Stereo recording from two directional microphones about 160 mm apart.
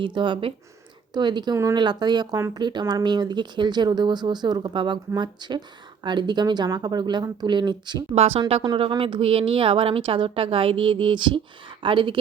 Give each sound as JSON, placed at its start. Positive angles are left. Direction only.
{"t": 0.0, "sound": "a woman's voice", "side_deg": -30}
{"t": 8.1, "sound": "a woman's voice", "side_deg": -40}